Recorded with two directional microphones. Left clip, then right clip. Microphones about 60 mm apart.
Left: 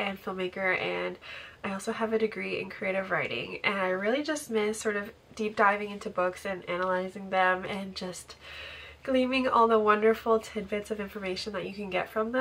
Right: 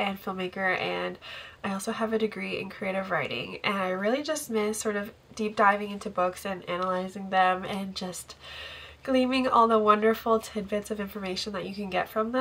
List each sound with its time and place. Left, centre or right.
0.0 s speech: right